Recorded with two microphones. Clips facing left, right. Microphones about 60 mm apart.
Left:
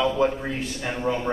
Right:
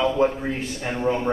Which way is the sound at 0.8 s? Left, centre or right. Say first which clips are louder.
Right 2 dB; centre.